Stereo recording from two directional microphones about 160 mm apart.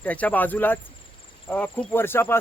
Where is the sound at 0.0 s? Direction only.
10° left (ahead or behind).